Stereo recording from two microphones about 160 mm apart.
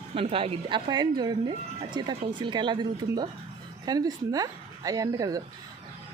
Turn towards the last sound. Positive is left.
turn(degrees=-20)  # may be behind; listen again after turning